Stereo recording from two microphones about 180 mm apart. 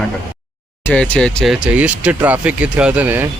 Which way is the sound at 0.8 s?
5° left (ahead or behind).